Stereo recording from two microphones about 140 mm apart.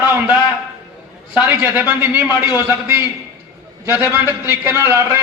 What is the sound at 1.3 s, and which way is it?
A man's voice, 10° right (ahead or behind).